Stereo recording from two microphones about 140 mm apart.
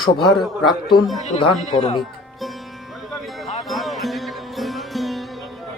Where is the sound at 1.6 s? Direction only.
50° left (ahead or behind).